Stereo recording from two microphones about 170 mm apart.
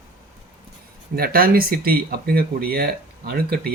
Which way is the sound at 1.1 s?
60° right (ahead or behind).